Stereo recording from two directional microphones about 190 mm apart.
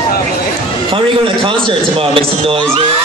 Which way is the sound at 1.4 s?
25° right (ahead or behind).